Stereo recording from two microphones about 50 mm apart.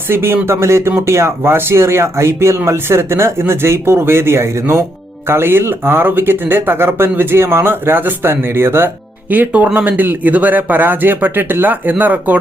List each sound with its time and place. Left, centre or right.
0.1 s speech: right
9.3 s speech: right